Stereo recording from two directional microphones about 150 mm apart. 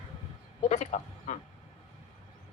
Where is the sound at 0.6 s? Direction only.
50° left (ahead or behind).